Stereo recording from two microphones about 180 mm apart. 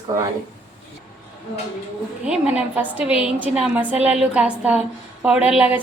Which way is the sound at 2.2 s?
5° right (ahead or behind).